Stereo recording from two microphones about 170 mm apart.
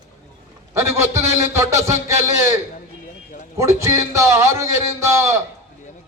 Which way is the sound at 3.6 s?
15° right (ahead or behind).